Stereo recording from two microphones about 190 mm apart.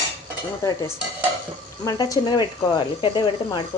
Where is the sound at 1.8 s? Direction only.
20° left (ahead or behind).